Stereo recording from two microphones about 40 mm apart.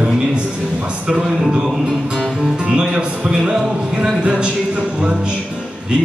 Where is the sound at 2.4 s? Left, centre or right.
Centre.